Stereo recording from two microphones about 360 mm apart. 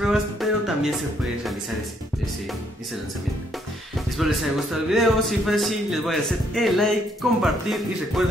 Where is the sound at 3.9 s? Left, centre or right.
Centre.